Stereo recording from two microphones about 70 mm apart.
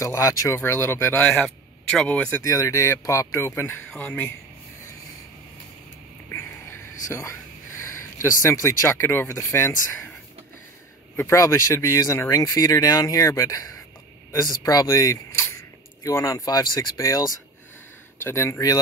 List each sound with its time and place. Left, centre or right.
0.0 s speech: left
0.7 s a man's voice: left
1.2 s speech: centre
2.4 s a man's voice: left
4.0 s speech: left
6.2 s music: left
7.1 s speech: left
11.3 s speech: left
15.3 s speech: left
18.2 s speech: left